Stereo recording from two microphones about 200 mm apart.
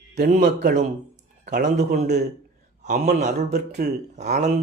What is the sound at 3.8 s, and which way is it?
Speech, 50° right (ahead or behind).